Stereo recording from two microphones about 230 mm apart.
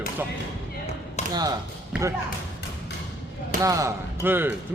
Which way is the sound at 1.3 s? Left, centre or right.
Centre.